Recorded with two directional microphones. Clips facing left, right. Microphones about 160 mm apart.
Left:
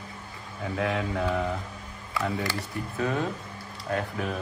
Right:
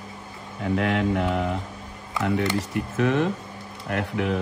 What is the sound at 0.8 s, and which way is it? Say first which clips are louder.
Speech: right 4 dB; 70° right (ahead or behind).